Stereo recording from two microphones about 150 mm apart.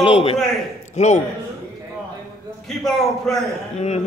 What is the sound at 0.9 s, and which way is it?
Speech, 50° left (ahead or behind).